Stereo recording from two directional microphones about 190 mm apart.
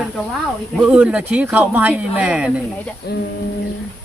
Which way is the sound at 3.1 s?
60° left (ahead or behind).